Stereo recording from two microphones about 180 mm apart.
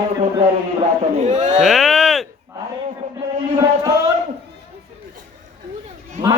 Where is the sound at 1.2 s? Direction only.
40° right (ahead or behind).